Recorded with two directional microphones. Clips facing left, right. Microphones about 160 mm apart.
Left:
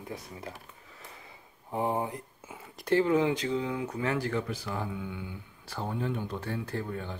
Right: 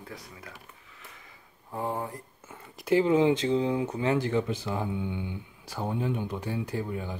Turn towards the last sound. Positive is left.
turn(degrees=-10)  # may be behind; listen again after turning